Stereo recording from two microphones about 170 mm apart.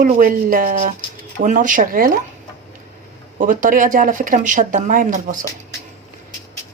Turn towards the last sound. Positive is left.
turn(degrees=-50)  # may be behind; listen again after turning